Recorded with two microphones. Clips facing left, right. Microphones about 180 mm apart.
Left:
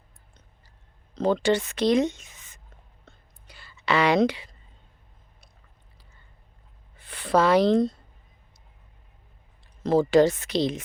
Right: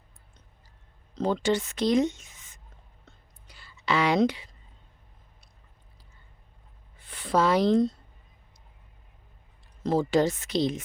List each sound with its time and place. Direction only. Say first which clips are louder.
1.2 s speech: left 3 dB; 65° left (ahead or behind)
3.4 s a sound: left 2 dB; 70° left (ahead or behind)
7.0 s speech: left 3 dB; 65° left (ahead or behind)
9.8 s speech: left 5 dB; 70° left (ahead or behind)